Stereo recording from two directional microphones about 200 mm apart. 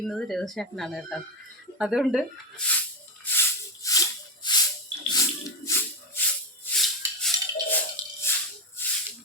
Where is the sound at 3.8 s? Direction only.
15° left (ahead or behind).